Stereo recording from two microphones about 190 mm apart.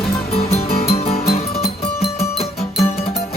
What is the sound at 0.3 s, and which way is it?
Music, 30° left (ahead or behind).